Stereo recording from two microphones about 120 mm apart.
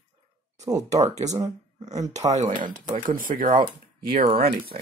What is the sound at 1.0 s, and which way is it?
Speech, 70° right (ahead or behind).